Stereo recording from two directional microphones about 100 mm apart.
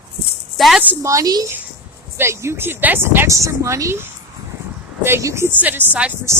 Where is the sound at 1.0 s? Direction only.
30° right (ahead or behind).